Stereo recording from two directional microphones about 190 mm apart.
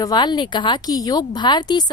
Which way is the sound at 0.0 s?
20° left (ahead or behind).